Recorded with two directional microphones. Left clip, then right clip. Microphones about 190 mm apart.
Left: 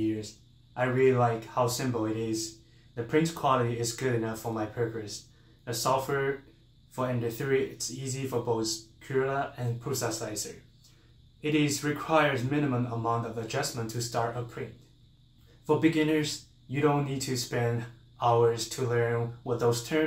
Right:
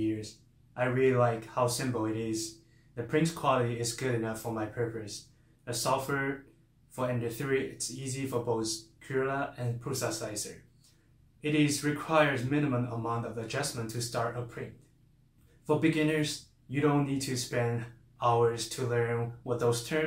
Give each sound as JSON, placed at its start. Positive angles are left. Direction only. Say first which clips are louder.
{"t": 0.7, "sound": "speech", "louder": "left 2 dB", "side_deg": 5}
{"t": 15.6, "sound": "speech", "louder": "left 2 dB", "side_deg": 5}